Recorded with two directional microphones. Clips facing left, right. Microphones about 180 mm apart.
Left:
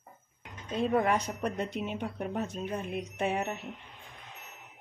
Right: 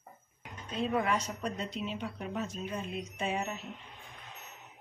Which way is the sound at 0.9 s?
50° left (ahead or behind).